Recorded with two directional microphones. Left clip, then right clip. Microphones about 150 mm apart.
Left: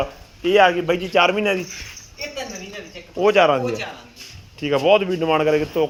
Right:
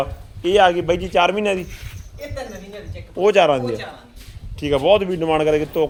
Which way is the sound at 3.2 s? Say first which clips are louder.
Right 1 dB; 25° right (ahead or behind).